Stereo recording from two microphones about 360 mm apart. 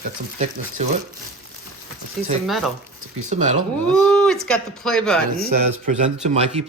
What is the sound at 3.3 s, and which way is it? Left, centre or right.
Speech, centre.